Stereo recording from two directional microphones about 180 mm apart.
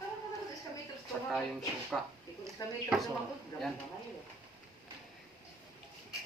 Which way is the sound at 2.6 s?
20° left (ahead or behind).